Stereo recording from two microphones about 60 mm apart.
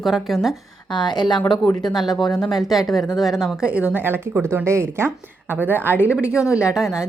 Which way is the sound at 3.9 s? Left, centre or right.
Right.